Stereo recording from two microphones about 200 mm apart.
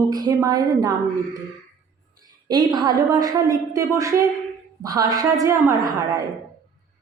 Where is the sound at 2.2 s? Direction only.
20° right (ahead or behind).